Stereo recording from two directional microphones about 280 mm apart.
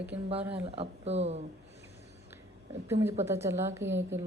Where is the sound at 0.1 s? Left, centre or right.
Right.